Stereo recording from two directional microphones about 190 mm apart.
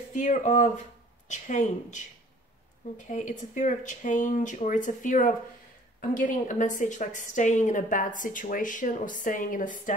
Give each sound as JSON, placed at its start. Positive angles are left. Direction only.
{"t": 0.1, "sound": "speech", "side_deg": 40}
{"t": 3.1, "sound": "a woman's voice", "side_deg": 40}